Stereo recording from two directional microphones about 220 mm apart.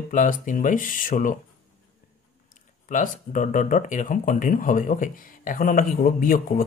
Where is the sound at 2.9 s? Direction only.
35° left (ahead or behind).